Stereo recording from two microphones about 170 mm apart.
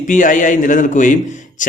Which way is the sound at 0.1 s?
50° left (ahead or behind).